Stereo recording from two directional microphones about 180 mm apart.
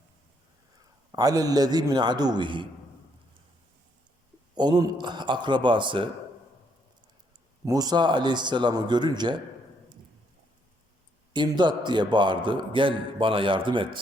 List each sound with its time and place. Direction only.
1.1 s a man's voice: 20° right (ahead or behind)
4.5 s a man's voice: 25° right (ahead or behind)
7.6 s a man's voice: 20° right (ahead or behind)
11.3 s a man's voice: 25° right (ahead or behind)